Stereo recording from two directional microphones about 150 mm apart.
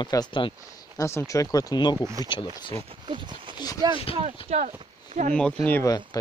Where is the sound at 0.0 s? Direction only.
30° left (ahead or behind).